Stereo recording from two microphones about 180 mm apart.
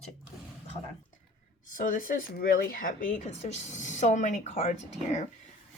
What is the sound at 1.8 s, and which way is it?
Speech, 50° left (ahead or behind).